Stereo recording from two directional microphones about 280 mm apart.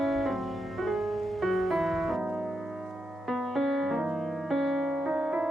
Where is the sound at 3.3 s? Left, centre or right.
Centre.